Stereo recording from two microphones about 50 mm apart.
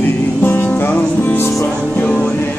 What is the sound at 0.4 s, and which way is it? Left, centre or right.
Music, left.